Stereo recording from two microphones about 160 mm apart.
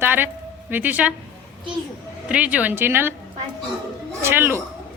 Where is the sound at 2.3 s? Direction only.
10° right (ahead or behind).